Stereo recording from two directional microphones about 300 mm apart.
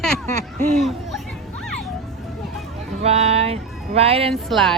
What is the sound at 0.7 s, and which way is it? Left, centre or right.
Speech, centre.